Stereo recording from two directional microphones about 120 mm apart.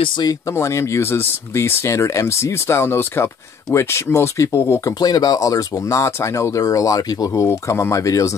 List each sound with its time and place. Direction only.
0.2 s speech: 25° left (ahead or behind)